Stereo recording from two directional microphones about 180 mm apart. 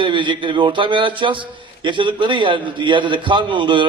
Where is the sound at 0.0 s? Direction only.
25° right (ahead or behind).